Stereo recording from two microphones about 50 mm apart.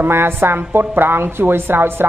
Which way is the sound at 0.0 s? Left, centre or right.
Right.